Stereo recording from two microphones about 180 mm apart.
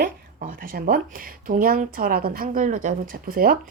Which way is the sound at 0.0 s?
50° right (ahead or behind).